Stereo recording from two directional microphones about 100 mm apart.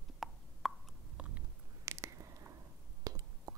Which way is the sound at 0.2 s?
Centre (ahead or behind).